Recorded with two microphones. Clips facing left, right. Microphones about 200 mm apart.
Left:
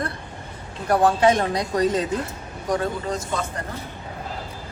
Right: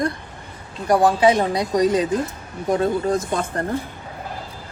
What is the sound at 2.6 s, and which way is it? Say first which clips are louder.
Speech: right 4 dB; 25° right (ahead or behind).